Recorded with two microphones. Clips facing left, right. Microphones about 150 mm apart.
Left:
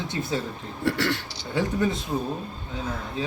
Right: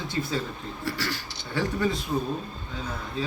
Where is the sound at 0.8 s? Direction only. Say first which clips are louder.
Left 7 dB; 70° left (ahead or behind).